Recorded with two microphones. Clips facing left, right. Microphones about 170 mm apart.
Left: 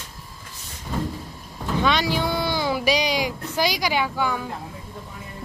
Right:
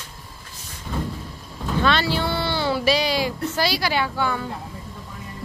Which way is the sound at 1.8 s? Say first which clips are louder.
Right 1 dB; 15° left (ahead or behind).